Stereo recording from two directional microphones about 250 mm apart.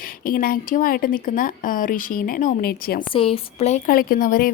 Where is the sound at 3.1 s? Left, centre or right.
Left.